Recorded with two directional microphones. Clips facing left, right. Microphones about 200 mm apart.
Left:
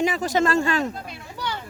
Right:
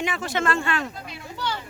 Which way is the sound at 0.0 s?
40° left (ahead or behind).